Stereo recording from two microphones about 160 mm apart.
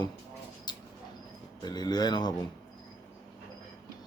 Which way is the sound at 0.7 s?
25° left (ahead or behind).